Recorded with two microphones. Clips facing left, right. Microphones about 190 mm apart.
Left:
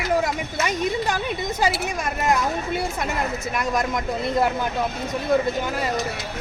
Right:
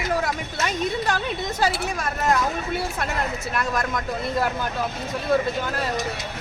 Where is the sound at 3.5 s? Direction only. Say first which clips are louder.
Left 2 dB; 15° left (ahead or behind).